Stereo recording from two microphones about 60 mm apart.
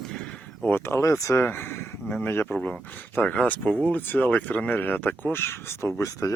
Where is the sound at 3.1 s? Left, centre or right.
Left.